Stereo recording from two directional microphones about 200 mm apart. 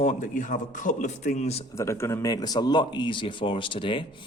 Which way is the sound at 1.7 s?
15° left (ahead or behind).